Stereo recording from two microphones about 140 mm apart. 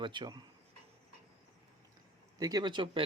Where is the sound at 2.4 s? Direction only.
25° right (ahead or behind).